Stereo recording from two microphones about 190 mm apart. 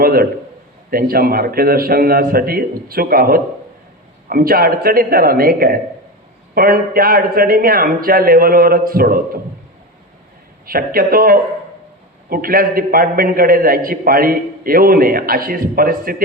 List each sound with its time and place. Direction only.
0.0 s a man's voice: 50° right (ahead or behind)
10.7 s a man's voice: 50° right (ahead or behind)